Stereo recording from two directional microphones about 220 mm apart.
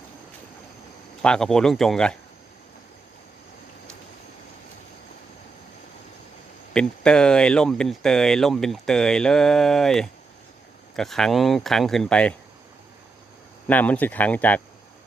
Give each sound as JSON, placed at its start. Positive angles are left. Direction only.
{"t": 1.2, "sound": "speech", "side_deg": 5}
{"t": 6.7, "sound": "speech", "side_deg": 5}
{"t": 13.7, "sound": "speech", "side_deg": 5}